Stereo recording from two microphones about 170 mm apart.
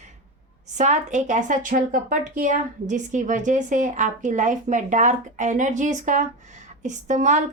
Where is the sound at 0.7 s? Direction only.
45° right (ahead or behind).